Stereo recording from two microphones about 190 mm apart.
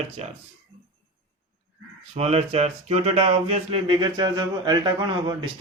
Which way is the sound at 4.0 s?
25° right (ahead or behind).